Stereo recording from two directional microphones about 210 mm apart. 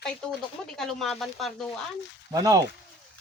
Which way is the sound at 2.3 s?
15° right (ahead or behind).